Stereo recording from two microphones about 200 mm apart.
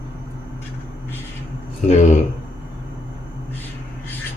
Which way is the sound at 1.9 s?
35° left (ahead or behind).